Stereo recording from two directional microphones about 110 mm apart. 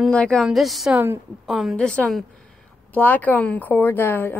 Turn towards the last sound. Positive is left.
turn(degrees=20)  # may be behind; listen again after turning